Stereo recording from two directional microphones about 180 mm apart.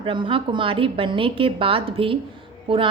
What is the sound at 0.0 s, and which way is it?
A woman's voice, 30° right (ahead or behind).